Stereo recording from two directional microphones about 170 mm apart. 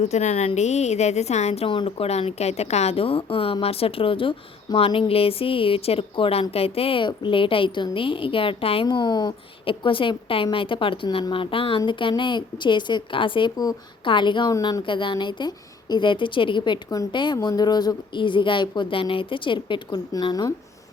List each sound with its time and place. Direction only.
0.0 s a woman's voice: 40° left (ahead or behind); by 20.5 s 20° left (ahead or behind)